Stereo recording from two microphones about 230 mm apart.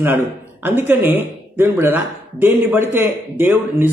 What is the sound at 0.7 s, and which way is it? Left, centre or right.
Speech, centre.